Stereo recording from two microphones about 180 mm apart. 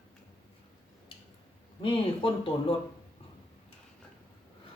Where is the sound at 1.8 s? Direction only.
30° left (ahead or behind).